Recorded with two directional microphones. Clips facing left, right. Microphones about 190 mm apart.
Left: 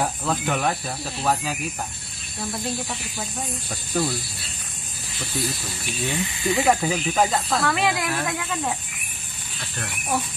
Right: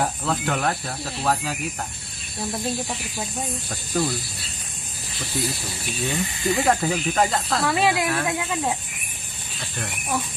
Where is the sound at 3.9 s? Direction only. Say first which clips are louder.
Even; 5° left (ahead or behind).